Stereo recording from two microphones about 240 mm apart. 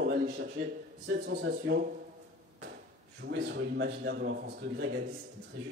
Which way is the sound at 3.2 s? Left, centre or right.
Right.